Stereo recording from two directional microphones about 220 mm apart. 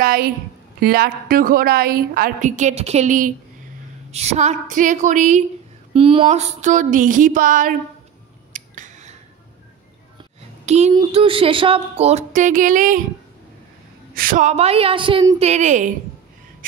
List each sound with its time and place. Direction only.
0.0 s a woman's voice: 40° right (ahead or behind)
8.5 s scissors: 35° right (ahead or behind)
10.6 s speech: 30° right (ahead or behind)
14.1 s speech: 40° right (ahead or behind)